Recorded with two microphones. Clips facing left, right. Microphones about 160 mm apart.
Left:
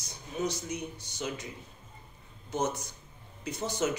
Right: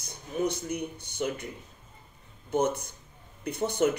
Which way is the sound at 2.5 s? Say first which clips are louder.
Right 5 dB; 55° right (ahead or behind).